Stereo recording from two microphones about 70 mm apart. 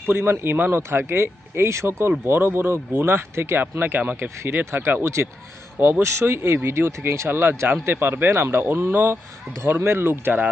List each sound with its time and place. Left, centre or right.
0.1 s speech: right
4.6 s speech: right